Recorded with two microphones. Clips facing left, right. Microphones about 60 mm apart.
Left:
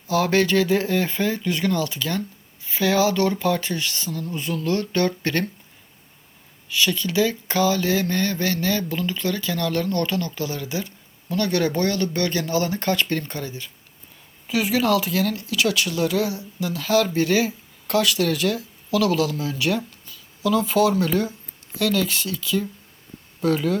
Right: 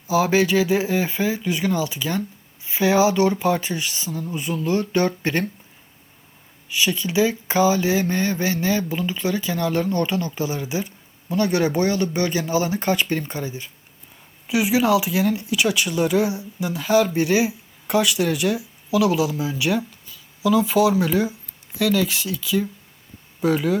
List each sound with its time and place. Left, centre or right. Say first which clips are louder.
0.1 s speech: right 1 dB; centre
6.7 s speech: even; centre